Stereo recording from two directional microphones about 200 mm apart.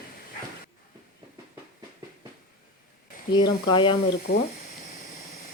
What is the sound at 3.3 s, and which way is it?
Speech, 20° left (ahead or behind).